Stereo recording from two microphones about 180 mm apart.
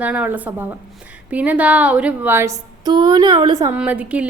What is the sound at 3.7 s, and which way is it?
Speech, 10° right (ahead or behind).